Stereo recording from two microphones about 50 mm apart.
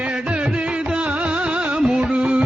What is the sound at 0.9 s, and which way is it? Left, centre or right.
Music, right.